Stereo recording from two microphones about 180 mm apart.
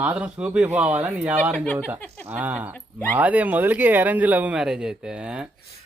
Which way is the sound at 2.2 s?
10° right (ahead or behind).